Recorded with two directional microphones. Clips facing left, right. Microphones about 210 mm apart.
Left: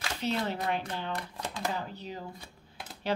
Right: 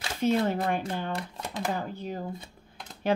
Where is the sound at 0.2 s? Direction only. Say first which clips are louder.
Right 7 dB; 50° right (ahead or behind).